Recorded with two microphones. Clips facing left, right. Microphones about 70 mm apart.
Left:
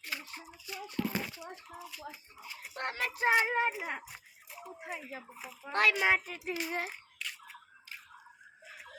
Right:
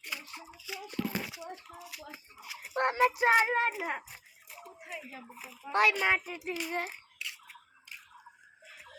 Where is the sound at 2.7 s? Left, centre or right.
Right.